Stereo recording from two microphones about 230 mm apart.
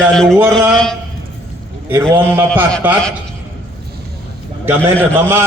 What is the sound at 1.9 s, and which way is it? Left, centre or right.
A man's voice, centre.